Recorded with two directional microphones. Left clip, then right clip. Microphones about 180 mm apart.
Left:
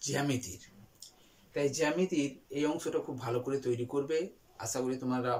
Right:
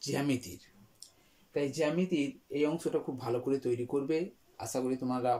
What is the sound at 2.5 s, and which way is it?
Speech, 25° right (ahead or behind).